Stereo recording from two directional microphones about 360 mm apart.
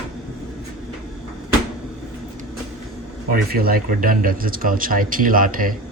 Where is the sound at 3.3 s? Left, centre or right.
Right.